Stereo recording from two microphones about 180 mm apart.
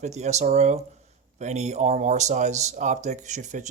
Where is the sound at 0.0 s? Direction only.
40° right (ahead or behind).